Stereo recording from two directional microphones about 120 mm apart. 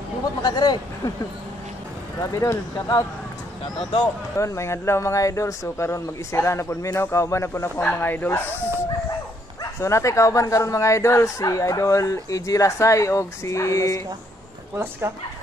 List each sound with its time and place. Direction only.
0.4 s speech: 35° left (ahead or behind)
2.1 s speech: 25° left (ahead or behind)
4.4 s speech: 25° left (ahead or behind)
9.6 s speech: 25° left (ahead or behind)